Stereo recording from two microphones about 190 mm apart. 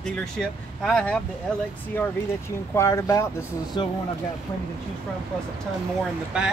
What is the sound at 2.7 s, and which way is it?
Speech, 15° left (ahead or behind).